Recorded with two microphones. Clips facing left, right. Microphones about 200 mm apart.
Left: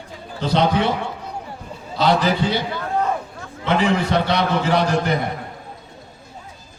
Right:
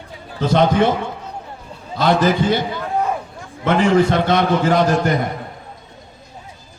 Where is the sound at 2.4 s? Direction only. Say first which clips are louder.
Right 4 dB; 50° right (ahead or behind).